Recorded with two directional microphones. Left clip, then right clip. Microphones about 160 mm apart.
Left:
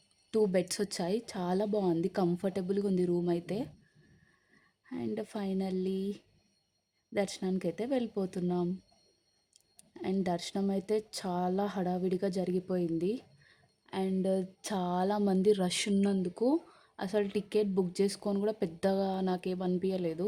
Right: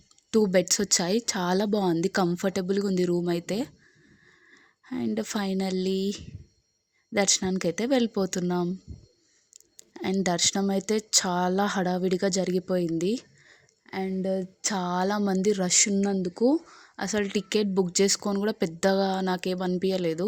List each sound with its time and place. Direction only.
0.3 s speech: 20° right (ahead or behind)
9.7 s a sound: 25° right (ahead or behind)
10.2 s speech: 25° right (ahead or behind)